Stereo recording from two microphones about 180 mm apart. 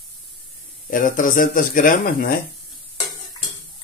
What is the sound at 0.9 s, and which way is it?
Speech, 45° left (ahead or behind).